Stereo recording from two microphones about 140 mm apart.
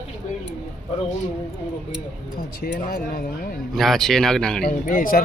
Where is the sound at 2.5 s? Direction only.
90° left.